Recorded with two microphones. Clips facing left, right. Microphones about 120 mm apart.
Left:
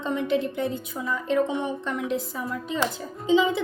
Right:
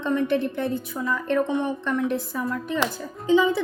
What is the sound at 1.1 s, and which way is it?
Speech, 55° right (ahead or behind).